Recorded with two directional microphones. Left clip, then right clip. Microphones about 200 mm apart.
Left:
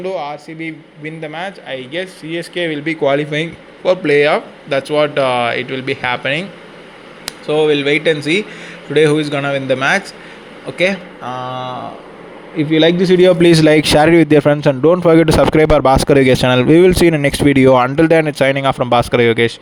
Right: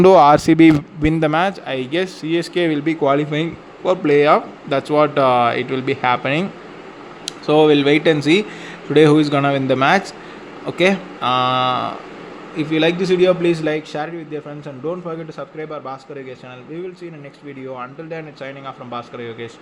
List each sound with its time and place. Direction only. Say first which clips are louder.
0.0 s speech: right 13 dB; 55° right (ahead or behind); by 6.4 s 5° right (ahead or behind)
7.4 s speech: even; 15° right (ahead or behind)
12.5 s speech: left 5 dB; 25° left (ahead or behind); by 19.5 s 50° left (ahead or behind)